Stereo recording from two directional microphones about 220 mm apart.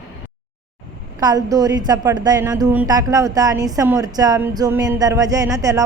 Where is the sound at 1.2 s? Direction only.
15° right (ahead or behind).